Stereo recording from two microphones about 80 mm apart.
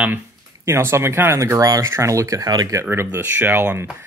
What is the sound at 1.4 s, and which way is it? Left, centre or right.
Speech, right.